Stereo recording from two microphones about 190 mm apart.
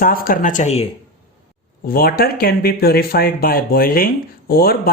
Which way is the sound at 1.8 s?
50° left (ahead or behind).